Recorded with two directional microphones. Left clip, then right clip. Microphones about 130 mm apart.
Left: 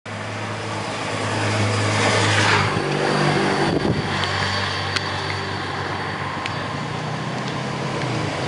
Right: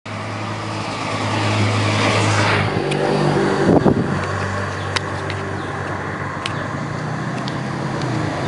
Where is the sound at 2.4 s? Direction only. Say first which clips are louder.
Even; 35° left (ahead or behind).